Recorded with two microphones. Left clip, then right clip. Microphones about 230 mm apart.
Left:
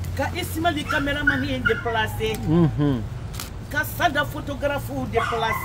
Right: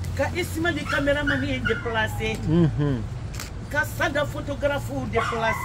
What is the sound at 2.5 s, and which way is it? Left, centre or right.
Speech, centre.